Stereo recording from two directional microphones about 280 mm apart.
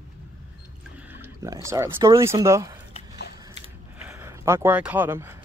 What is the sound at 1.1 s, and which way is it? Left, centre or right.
Speech, centre.